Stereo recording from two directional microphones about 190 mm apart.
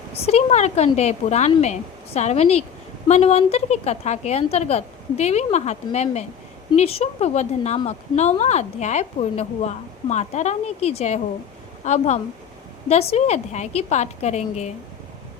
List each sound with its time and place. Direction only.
0.3 s speech: 35° left (ahead or behind)